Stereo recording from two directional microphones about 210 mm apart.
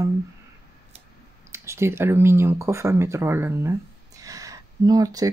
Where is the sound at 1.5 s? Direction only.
10° right (ahead or behind).